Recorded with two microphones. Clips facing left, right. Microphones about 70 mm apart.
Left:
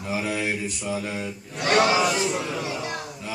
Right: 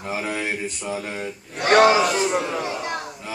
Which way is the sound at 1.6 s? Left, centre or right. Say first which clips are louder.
Right 5 dB; right.